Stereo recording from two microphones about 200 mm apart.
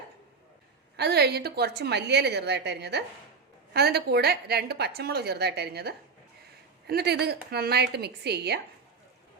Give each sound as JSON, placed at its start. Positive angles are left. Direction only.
{"t": 0.9, "sound": "a woman's voice", "side_deg": -55}